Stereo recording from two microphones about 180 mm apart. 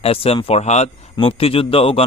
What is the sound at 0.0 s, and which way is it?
A man's voice, 30° left (ahead or behind).